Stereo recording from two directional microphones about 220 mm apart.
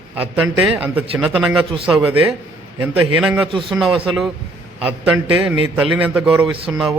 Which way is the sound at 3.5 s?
20° right (ahead or behind).